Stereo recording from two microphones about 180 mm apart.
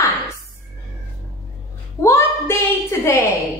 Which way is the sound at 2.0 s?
15° left (ahead or behind).